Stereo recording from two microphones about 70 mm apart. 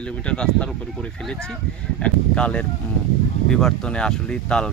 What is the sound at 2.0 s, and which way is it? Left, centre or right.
Speech, centre.